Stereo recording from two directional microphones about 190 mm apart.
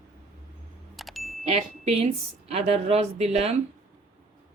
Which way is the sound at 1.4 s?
35° right (ahead or behind).